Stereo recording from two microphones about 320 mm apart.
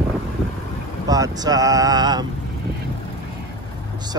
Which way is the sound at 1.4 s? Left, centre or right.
Centre.